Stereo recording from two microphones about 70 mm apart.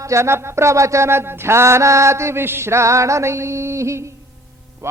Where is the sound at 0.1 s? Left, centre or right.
Right.